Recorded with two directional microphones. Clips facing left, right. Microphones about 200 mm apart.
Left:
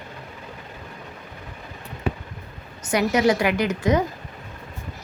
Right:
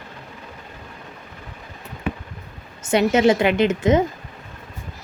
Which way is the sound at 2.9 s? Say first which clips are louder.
Right 3 dB; 25° right (ahead or behind).